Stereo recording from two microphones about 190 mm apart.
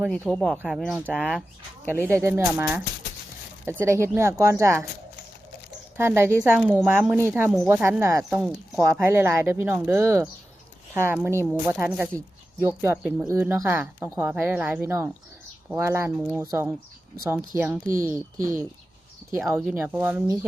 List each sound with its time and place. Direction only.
0.1 s speech: 5° left (ahead or behind)
1.9 s speech: 10° right (ahead or behind)
6.0 s speech: 10° right (ahead or behind)
19.7 s speech: 10° right (ahead or behind)